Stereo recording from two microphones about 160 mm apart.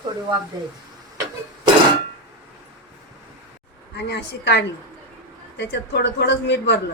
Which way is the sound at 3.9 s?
90° left.